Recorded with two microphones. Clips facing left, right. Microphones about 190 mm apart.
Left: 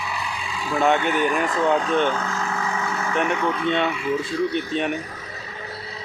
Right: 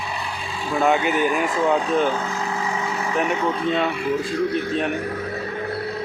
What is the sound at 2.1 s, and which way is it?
Vehicle, 20° right (ahead or behind).